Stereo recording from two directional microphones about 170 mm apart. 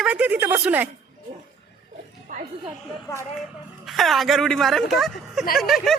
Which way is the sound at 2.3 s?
55° right (ahead or behind).